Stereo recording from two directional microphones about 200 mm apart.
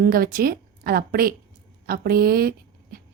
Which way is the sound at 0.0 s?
45° right (ahead or behind).